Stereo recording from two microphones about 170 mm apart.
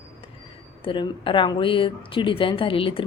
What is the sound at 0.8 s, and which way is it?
A woman's voice, 30° left (ahead or behind).